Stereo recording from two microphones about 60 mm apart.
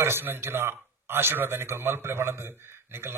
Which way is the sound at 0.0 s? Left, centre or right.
Right.